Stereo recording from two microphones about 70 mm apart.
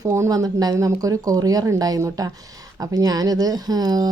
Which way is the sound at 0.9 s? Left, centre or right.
Right.